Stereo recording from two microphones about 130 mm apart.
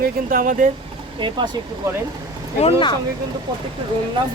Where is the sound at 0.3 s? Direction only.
90° right.